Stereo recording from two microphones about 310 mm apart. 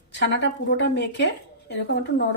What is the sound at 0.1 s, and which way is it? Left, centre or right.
A woman's voice, left.